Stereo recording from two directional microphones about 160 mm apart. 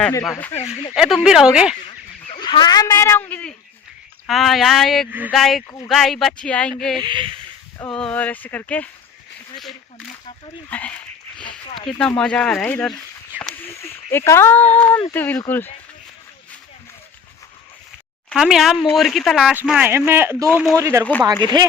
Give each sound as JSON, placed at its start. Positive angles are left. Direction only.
{"t": 0.3, "sound": "speech", "side_deg": 15}
{"t": 0.9, "sound": "speech", "side_deg": -5}
{"t": 2.4, "sound": "speech", "side_deg": 30}
{"t": 7.0, "sound": "speech", "side_deg": -30}
{"t": 7.9, "sound": "speech", "side_deg": 5}
{"t": 10.7, "sound": "a sound", "side_deg": 10}
{"t": 11.9, "sound": "speech", "side_deg": 5}
{"t": 18.3, "sound": "speech", "side_deg": -5}